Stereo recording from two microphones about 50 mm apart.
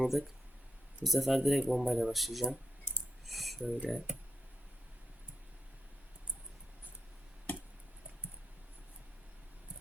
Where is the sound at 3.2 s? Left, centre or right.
Centre.